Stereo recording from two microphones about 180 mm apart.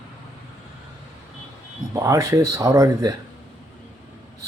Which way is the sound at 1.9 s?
15° right (ahead or behind).